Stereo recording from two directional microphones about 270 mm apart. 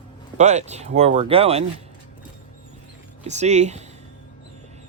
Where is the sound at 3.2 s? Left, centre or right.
Right.